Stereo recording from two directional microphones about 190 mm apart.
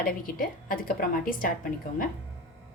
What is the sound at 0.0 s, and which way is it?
A woman's voice, 50° left (ahead or behind).